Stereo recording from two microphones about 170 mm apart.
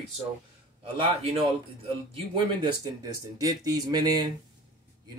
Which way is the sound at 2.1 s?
30° right (ahead or behind).